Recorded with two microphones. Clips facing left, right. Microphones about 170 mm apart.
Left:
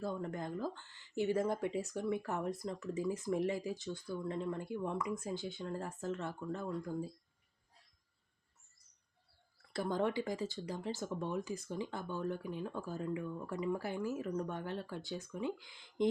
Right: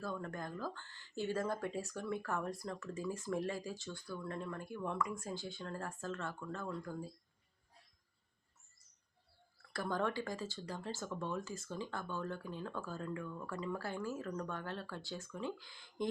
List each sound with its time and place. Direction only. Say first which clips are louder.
0.0 s speech: left 3 dB; 20° left (ahead or behind)
9.7 s speech: left 3 dB; 20° left (ahead or behind)